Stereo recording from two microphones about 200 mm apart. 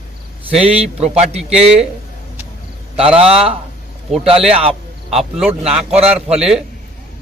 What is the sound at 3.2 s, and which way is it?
Speech, 30° right (ahead or behind).